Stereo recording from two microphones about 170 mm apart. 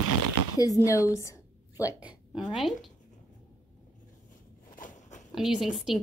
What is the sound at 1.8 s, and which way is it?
A woman's voice, 10° right (ahead or behind).